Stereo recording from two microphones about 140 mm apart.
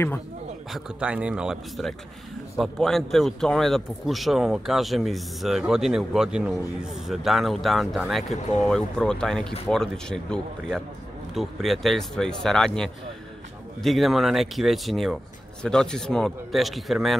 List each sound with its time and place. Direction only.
0.7 s a man's voice: 10° right (ahead or behind)
8.4 s speech: 55° left (ahead or behind)
8.6 s a man's voice: 5° left (ahead or behind)